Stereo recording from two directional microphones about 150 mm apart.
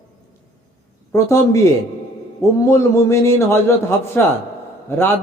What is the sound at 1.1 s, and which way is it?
Speech, 20° left (ahead or behind).